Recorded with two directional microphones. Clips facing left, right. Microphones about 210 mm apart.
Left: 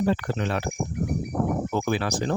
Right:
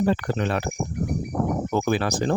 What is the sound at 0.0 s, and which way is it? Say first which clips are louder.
Speech: right 2 dB; 50° right (ahead or behind).